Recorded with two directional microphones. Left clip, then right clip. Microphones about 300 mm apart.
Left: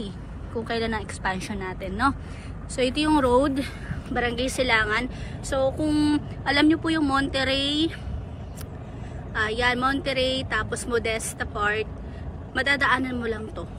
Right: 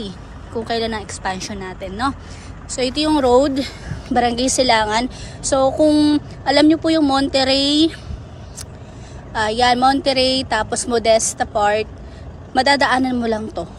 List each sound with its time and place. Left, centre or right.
0.5 s a woman's voice: centre
9.3 s a woman's voice: centre